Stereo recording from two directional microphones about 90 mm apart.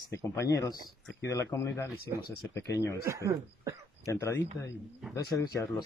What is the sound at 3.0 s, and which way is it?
Speech, 35° right (ahead or behind).